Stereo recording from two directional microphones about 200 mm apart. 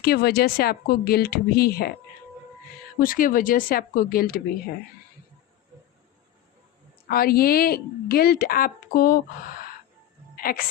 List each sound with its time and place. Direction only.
0.0 s a woman's voice: 50° left (ahead or behind)
3.0 s a woman's voice: 45° left (ahead or behind)
7.1 s a woman's voice: 50° left (ahead or behind)
10.3 s a woman's voice: 45° left (ahead or behind)